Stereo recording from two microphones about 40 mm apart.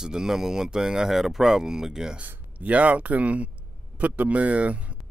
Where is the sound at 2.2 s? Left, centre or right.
Right.